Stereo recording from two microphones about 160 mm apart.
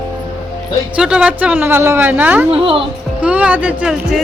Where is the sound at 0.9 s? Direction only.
5° right (ahead or behind).